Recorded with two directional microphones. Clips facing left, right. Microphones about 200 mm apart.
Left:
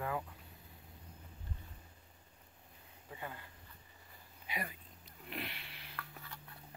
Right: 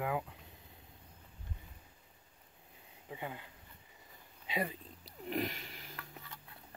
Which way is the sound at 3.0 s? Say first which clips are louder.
Right 4 dB; 15° right (ahead or behind).